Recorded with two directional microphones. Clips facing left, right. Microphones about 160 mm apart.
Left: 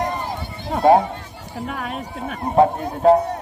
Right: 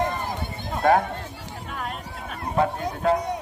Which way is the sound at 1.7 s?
65° left (ahead or behind).